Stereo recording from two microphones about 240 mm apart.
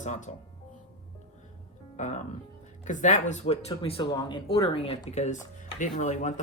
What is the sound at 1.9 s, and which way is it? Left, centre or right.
Speech, left.